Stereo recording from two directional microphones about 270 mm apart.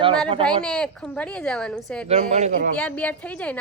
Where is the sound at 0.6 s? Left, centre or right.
Centre.